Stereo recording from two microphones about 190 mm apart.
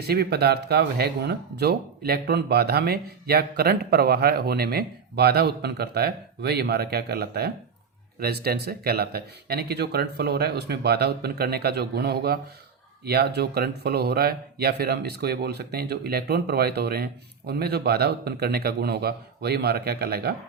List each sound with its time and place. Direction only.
0.1 s speech: 55° right (ahead or behind)